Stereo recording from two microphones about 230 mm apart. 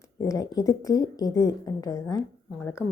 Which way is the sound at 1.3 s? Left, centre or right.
Left.